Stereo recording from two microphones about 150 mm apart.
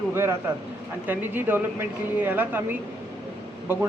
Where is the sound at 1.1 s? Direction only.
10° right (ahead or behind).